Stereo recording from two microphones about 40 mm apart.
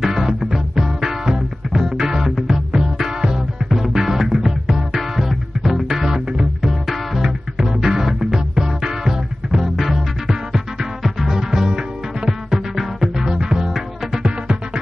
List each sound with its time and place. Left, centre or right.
0.0 s music: centre
3.6 s music: centre
9.8 s music: centre
13.7 s music: centre
14.2 s music: right